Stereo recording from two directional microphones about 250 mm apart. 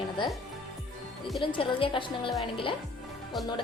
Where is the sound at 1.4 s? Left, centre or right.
Left.